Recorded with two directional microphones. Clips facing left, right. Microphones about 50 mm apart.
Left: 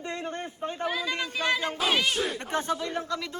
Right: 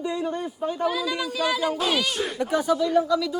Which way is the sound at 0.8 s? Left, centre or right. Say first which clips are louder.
Right 4 dB; left.